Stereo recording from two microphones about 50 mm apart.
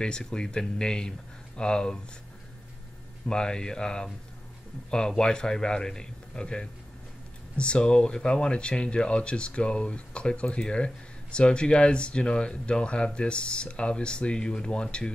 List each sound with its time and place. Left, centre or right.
0.0 s a man's voice: centre
3.3 s a man's voice: centre